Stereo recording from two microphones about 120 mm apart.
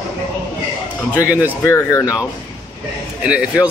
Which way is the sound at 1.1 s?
15° right (ahead or behind).